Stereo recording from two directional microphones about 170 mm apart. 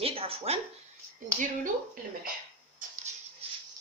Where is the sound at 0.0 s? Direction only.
35° right (ahead or behind).